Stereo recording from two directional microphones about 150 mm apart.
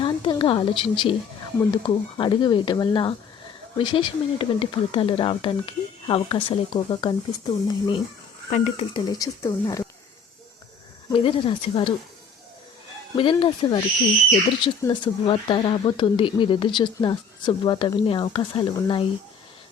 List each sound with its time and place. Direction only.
0.0 s a sound: 35° left (ahead or behind)
1.7 s speech: 35° left (ahead or behind)
8.4 s speech: 50° left (ahead or behind)
8.9 s speech: 25° left (ahead or behind)
11.1 s speech: 40° left (ahead or behind)
13.1 s speech: 35° left (ahead or behind)